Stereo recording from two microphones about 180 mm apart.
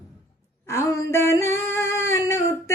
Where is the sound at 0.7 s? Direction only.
15° left (ahead or behind).